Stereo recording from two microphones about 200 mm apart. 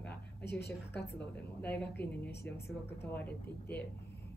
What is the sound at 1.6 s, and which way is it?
Speech, 5° left (ahead or behind).